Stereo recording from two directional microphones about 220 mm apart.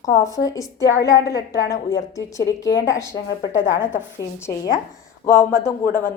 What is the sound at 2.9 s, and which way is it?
Female singing, 15° left (ahead or behind).